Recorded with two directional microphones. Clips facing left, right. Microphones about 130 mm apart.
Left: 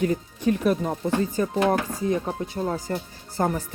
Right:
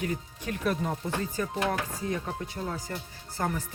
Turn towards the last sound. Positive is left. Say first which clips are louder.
# left 6 dB
turn(degrees=30)  # may be behind; listen again after turning